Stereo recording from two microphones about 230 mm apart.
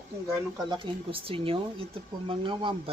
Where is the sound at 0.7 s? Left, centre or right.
Right.